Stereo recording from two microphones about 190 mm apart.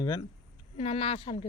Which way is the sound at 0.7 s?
30° left (ahead or behind).